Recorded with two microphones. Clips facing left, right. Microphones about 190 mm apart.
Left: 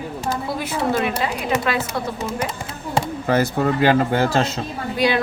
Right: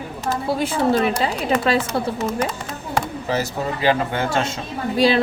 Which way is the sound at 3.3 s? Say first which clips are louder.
Left 5 dB; 50° left (ahead or behind).